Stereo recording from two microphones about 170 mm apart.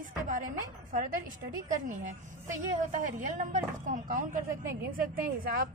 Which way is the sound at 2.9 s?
50° right (ahead or behind).